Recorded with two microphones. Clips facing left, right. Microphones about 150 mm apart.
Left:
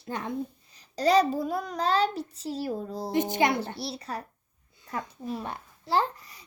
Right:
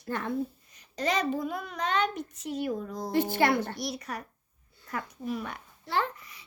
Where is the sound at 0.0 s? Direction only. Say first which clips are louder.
Right 1 dB; 20° left (ahead or behind).